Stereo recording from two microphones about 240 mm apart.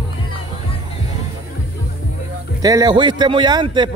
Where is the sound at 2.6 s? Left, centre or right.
Centre.